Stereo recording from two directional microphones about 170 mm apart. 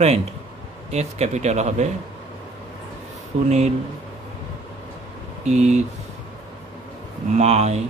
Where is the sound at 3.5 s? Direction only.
40° right (ahead or behind).